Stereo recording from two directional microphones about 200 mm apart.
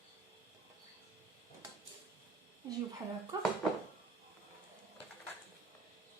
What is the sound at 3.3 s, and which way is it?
Speech, 20° right (ahead or behind).